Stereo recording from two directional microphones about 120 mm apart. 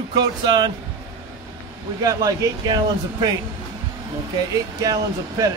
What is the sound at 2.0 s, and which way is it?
Speech, 30° right (ahead or behind).